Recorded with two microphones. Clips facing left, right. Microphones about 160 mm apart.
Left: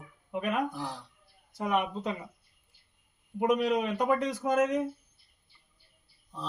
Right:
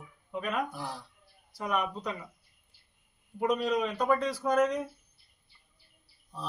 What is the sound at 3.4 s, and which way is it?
Speech, 20° left (ahead or behind).